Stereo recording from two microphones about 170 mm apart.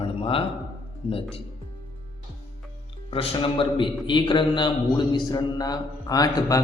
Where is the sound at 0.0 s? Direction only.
30° left (ahead or behind).